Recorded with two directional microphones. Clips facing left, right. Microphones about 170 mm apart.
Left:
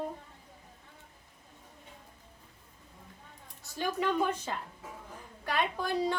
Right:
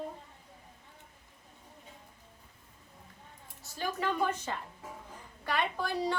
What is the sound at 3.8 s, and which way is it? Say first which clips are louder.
Child singing: left 2 dB; 15° left (ahead or behind).